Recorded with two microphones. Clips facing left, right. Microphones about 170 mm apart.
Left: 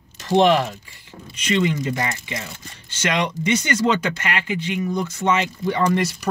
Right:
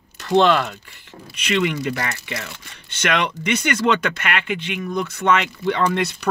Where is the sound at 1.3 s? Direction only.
65° right (ahead or behind).